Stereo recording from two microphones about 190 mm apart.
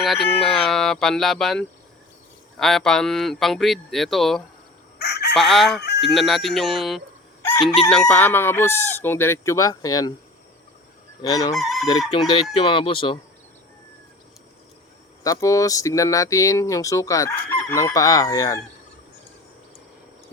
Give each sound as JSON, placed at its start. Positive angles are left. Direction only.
{"t": 0.4, "sound": "speech", "side_deg": 0}
{"t": 4.9, "sound": "chicken", "side_deg": 60}
{"t": 5.3, "sound": "speech", "side_deg": 0}
{"t": 5.8, "sound": "fowl", "side_deg": 60}
{"t": 6.1, "sound": "speech", "side_deg": 0}
{"t": 11.2, "sound": "speech", "side_deg": 20}
{"t": 11.5, "sound": "speech", "side_deg": 0}
{"t": 12.5, "sound": "speech", "side_deg": 30}
{"t": 15.2, "sound": "speech", "side_deg": 15}